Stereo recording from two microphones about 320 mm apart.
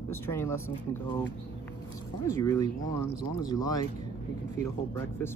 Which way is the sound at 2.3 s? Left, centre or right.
Centre.